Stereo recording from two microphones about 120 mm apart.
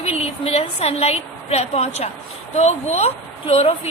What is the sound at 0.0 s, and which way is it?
A woman's voice, 60° left (ahead or behind).